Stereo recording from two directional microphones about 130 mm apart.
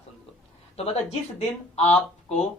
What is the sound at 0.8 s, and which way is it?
A woman's voice, 55° left (ahead or behind).